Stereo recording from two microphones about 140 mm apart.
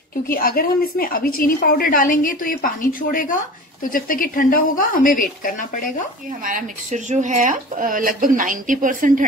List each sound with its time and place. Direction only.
0.3 s a woman's voice: 90° left; by 5.9 s 70° left (ahead or behind)
6.4 s speech: 65° right (ahead or behind)